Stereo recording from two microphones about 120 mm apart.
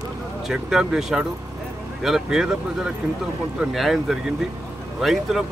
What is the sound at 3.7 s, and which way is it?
Speech, centre (ahead or behind).